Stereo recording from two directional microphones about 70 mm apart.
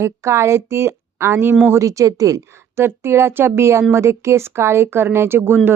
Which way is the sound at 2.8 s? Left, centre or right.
Right.